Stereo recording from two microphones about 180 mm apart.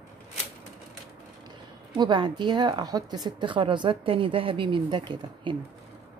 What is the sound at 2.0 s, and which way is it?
A woman's voice, 25° right (ahead or behind).